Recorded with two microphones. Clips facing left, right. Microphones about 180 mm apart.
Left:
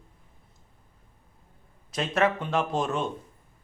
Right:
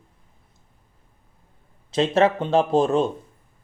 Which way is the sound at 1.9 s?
25° right (ahead or behind).